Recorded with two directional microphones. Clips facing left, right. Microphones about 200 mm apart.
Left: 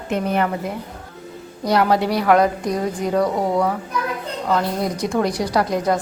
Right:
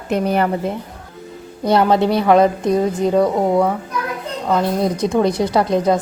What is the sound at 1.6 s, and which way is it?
A woman's voice, 25° right (ahead or behind).